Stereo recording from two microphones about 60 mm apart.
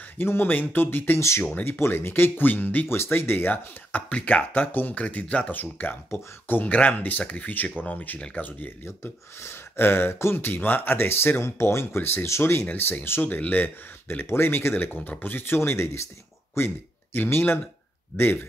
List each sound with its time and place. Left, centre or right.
0.2 s speech: left
8.8 s speech: left
14.2 s speech: left
14.8 s speech: left